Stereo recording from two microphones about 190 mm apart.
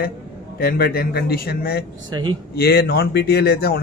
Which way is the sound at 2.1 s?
25° right (ahead or behind).